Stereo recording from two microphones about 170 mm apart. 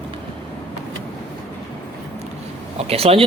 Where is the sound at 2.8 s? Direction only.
35° right (ahead or behind).